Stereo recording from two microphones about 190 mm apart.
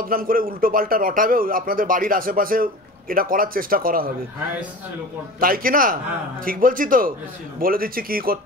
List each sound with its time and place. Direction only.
0.1 s a man's voice: 50° right (ahead or behind)
5.4 s a man's voice: 50° right (ahead or behind)